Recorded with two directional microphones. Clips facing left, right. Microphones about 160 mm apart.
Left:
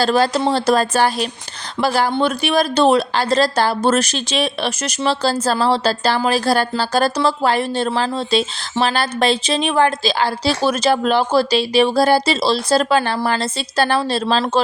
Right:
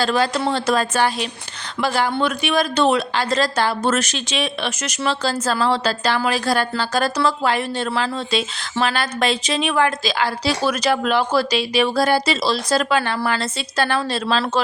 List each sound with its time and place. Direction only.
0.0 s a woman's voice: 35° left (ahead or behind)